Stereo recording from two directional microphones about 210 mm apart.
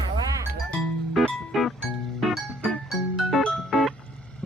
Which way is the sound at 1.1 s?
Centre (ahead or behind).